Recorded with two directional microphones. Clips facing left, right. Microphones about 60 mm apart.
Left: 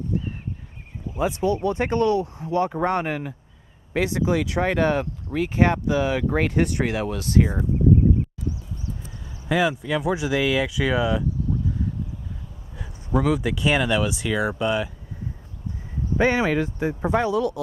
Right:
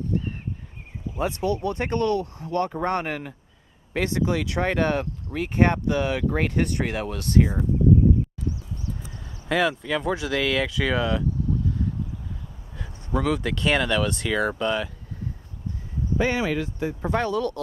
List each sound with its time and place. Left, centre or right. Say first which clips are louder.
1.1 s speech: left 3 dB; centre
9.5 s speech: left 1 dB; centre
12.7 s speech: left 3 dB; centre
16.2 s speech: left 4 dB; left
17.1 s speech: left 2 dB; centre